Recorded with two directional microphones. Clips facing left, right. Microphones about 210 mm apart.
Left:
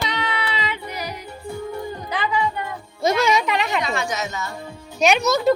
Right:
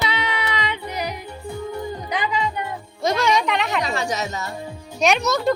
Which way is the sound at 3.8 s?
35° right (ahead or behind).